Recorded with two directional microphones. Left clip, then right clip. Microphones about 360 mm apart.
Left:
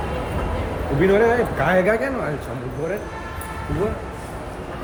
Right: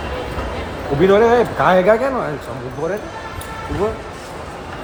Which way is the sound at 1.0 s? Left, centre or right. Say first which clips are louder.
Right 5 dB; centre.